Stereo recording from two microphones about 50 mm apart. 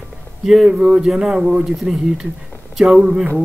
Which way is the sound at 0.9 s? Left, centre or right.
Centre.